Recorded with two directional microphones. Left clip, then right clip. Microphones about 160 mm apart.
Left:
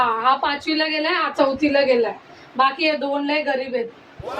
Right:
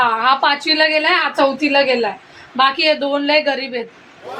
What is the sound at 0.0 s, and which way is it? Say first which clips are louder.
A woman's voice: right 4 dB; 65° right (ahead or behind).